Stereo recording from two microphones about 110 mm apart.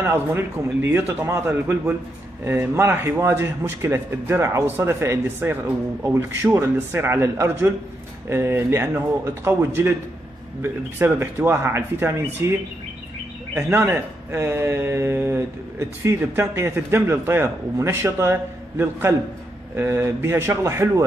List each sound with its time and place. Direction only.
0.0 s speech: 20° right (ahead or behind)
13.6 s speech: 20° right (ahead or behind)